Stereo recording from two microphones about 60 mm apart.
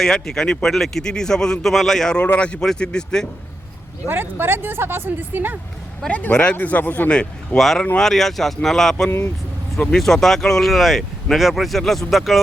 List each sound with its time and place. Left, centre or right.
0.0 s speech: centre
2.1 s speech: centre
4.0 s speech: right
6.1 s speech: left
7.1 s speech: centre
7.9 s speech: centre